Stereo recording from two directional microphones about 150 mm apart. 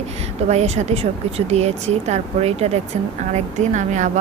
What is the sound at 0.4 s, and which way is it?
Speech, 50° right (ahead or behind).